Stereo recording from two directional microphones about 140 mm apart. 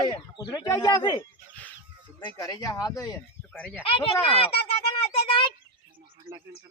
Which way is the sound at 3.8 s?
40° left (ahead or behind).